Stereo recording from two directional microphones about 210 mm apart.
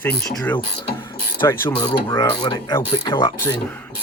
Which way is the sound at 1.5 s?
15° left (ahead or behind).